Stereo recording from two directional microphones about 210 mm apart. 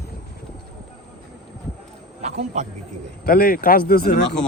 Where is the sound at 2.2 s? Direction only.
30° right (ahead or behind).